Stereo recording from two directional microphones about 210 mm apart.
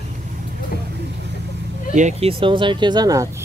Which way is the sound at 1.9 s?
35° right (ahead or behind).